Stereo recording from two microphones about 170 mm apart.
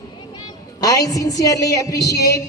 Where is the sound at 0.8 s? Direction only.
20° left (ahead or behind).